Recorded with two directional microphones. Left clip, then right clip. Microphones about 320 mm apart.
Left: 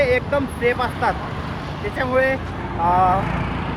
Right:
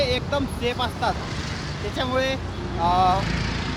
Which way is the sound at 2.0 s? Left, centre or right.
Centre.